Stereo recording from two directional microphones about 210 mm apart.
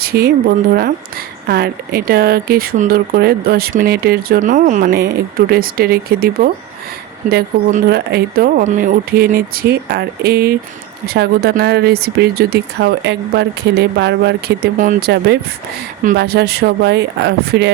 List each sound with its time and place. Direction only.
0.0 s speech: 45° right (ahead or behind)